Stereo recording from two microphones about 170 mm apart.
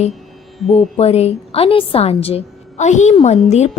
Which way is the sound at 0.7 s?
40° left (ahead or behind).